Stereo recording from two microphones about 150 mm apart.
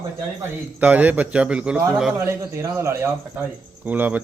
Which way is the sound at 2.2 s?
20° right (ahead or behind).